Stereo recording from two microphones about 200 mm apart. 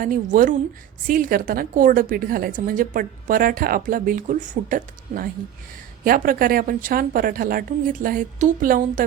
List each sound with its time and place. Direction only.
0.0 s a woman's voice: 40° right (ahead or behind)